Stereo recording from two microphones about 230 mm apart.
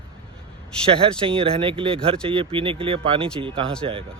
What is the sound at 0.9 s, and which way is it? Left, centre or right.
Speech, right.